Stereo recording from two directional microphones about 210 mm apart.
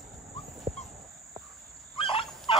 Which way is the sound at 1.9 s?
25° left (ahead or behind).